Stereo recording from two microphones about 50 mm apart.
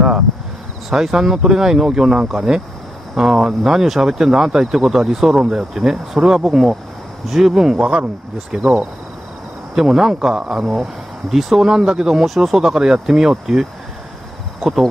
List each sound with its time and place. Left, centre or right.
0.8 s speech: centre
7.8 s speech: right
8.5 s speech: centre